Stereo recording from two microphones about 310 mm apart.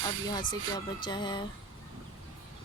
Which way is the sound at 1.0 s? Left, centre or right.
Centre.